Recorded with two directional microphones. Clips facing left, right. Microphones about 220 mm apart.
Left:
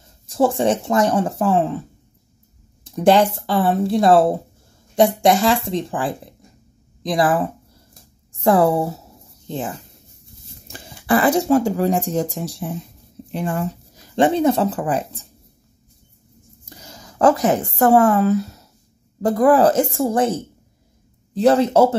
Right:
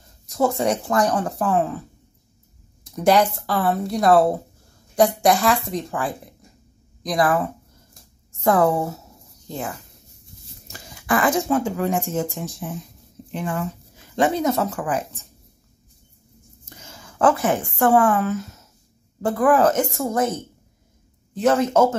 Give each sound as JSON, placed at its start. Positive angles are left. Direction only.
{"t": 0.3, "sound": "speech", "side_deg": 30}
{"t": 2.8, "sound": "speech", "side_deg": 30}
{"t": 16.6, "sound": "a woman's voice", "side_deg": 35}
{"t": 21.4, "sound": "speech", "side_deg": 35}